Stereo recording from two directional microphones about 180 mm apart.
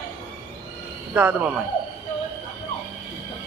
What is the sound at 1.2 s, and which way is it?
Speech, 10° right (ahead or behind).